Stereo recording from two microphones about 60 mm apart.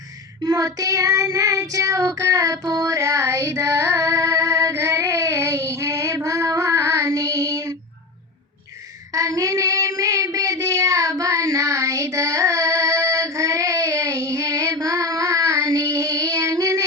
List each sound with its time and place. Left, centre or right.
0.4 s child singing: right
9.1 s child singing: right